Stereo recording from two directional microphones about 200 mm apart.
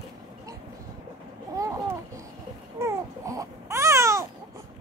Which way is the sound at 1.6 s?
15° right (ahead or behind).